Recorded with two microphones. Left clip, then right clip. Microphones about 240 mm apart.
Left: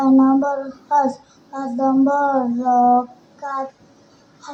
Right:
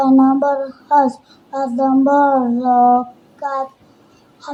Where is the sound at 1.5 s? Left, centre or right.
Right.